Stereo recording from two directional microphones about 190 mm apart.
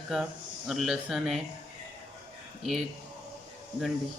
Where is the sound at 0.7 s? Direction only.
Centre (ahead or behind).